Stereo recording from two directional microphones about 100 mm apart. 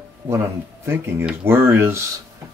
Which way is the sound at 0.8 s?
25° right (ahead or behind).